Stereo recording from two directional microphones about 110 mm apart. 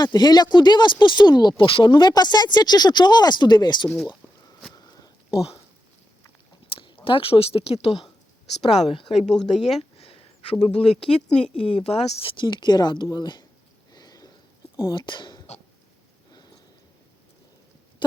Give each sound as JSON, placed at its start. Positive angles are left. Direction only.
{"t": 0.0, "sound": "speech", "side_deg": 40}
{"t": 3.9, "sound": "speech", "side_deg": 0}
{"t": 4.7, "sound": "a sound", "side_deg": 35}
{"t": 6.7, "sound": "speech", "side_deg": 55}
{"t": 9.3, "sound": "speech", "side_deg": 5}
{"t": 10.0, "sound": "a sound", "side_deg": 60}
{"t": 11.0, "sound": "speech", "side_deg": 60}
{"t": 13.9, "sound": "a sound", "side_deg": 35}
{"t": 14.9, "sound": "speech", "side_deg": 45}